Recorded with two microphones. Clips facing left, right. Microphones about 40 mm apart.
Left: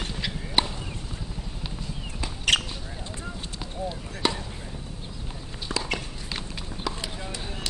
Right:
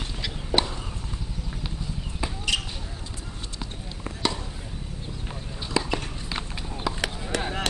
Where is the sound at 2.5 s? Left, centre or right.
Left.